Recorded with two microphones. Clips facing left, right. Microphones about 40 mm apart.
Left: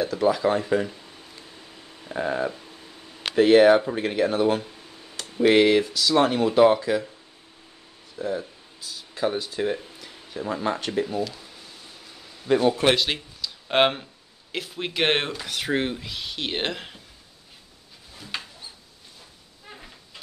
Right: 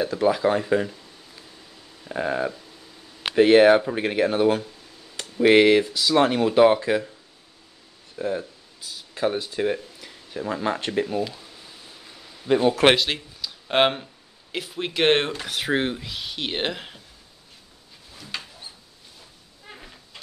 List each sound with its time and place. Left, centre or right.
0.0 s speech: centre
0.8 s a sound: centre
2.0 s speech: centre
8.2 s speech: right
8.8 s speech: centre
11.3 s a sound: centre
12.9 s speech: centre
15.4 s speech: centre
18.1 s a sound: centre